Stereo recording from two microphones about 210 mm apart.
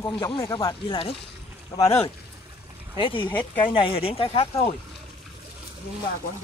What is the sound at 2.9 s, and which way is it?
Speech, 25° left (ahead or behind).